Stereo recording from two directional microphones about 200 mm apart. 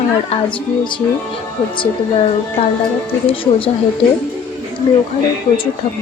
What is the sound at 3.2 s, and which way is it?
Speech, 25° left (ahead or behind).